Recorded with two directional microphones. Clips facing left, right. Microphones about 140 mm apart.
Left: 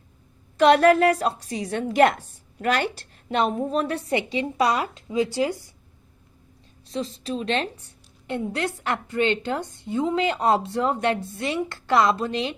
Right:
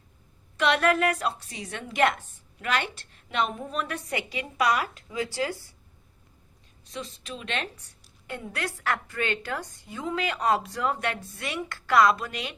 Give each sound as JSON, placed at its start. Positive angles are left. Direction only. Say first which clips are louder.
{"t": 0.5, "sound": "a woman's voice", "louder": "left 8 dB", "side_deg": 35}
{"t": 6.8, "sound": "a woman's voice", "louder": "left 9 dB", "side_deg": 35}